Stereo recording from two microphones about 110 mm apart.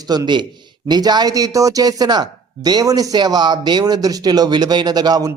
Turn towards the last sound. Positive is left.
turn(degrees=-35)  # may be behind; listen again after turning